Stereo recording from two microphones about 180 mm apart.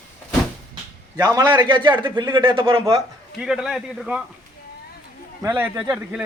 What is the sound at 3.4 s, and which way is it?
Speech, 5° right (ahead or behind).